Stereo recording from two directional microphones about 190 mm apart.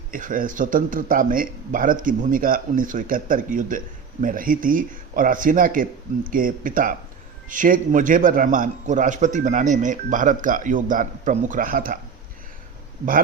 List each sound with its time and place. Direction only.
0.1 s speech: 45° right (ahead or behind)